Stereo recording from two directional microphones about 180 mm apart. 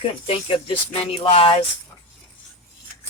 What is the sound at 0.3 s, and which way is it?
Speech, 30° left (ahead or behind).